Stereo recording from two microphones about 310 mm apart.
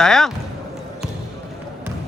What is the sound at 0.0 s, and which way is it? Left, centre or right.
Speech, centre.